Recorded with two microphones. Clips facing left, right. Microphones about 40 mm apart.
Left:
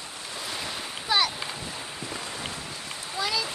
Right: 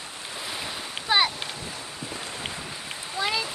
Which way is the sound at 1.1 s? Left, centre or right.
Right.